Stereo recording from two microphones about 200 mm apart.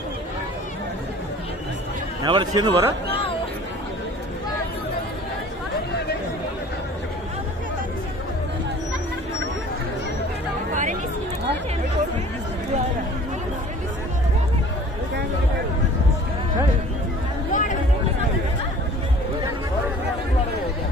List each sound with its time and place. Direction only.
2.2 s speech: 20° right (ahead or behind)
10.7 s chatter: 40° right (ahead or behind)
17.5 s chatter: 40° left (ahead or behind)